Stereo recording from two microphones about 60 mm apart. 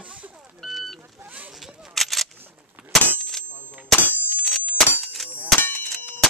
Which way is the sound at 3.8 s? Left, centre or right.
Centre.